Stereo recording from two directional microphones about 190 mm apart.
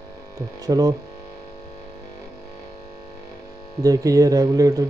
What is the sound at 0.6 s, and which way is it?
Speech, 20° right (ahead or behind).